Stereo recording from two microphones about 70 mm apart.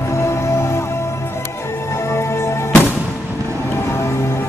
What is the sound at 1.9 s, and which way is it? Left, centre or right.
Music, left.